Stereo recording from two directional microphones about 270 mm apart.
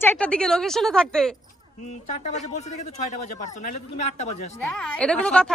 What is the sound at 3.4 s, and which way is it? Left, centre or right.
Speech, left.